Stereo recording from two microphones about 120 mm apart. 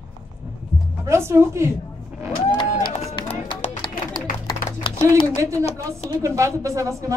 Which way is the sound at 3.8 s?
40° left (ahead or behind).